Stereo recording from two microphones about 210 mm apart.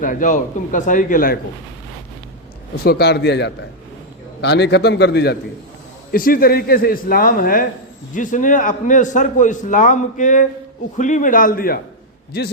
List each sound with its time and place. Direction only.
0.0 s a man's voice: 40° left (ahead or behind)
2.8 s a man's voice: 50° left (ahead or behind)